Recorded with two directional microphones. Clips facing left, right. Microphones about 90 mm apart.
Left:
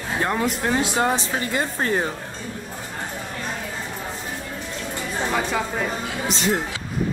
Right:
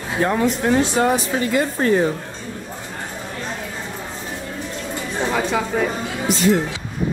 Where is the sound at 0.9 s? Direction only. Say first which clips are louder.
Right 4 dB; 25° left (ahead or behind).